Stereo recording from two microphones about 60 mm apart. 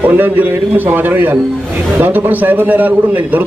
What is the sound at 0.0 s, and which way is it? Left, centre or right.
A man's voice, right.